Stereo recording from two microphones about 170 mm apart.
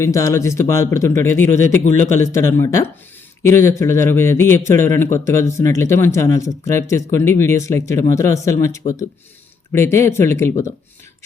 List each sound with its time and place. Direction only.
0.0 s a man's voice: 20° left (ahead or behind)